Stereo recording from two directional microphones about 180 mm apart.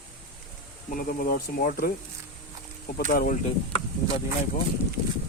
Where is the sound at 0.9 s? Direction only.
50° left (ahead or behind).